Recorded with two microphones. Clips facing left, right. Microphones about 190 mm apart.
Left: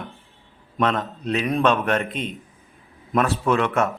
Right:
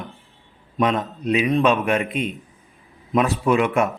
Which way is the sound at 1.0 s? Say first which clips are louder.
Right 4 dB; 10° right (ahead or behind).